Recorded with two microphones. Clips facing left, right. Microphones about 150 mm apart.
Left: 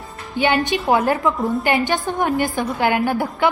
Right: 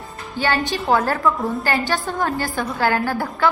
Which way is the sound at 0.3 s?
15° left (ahead or behind).